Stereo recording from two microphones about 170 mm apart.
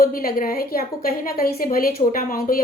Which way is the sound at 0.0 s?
60° left (ahead or behind).